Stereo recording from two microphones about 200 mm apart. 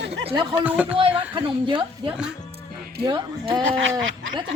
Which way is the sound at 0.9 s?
25° right (ahead or behind).